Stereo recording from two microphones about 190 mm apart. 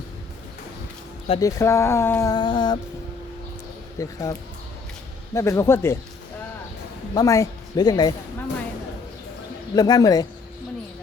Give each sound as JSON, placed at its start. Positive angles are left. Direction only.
{"t": 1.4, "sound": "speech", "side_deg": 15}
{"t": 3.9, "sound": "speech", "side_deg": 15}
{"t": 7.1, "sound": "speech", "side_deg": 20}
{"t": 9.7, "sound": "speech", "side_deg": 20}